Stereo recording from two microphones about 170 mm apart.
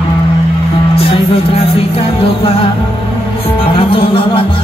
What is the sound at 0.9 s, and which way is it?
Music, 35° left (ahead or behind).